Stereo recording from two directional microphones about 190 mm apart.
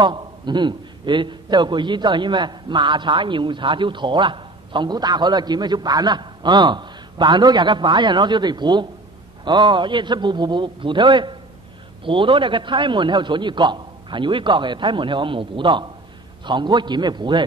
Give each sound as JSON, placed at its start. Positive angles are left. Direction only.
{"t": 0.0, "sound": "a man's voice", "side_deg": -25}